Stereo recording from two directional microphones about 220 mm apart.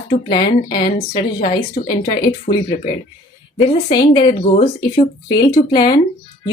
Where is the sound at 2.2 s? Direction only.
25° left (ahead or behind).